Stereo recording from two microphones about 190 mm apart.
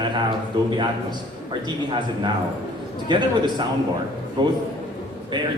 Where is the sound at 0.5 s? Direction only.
25° right (ahead or behind).